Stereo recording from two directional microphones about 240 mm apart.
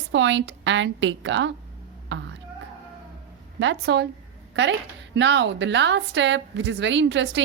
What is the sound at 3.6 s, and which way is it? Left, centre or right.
Speech, right.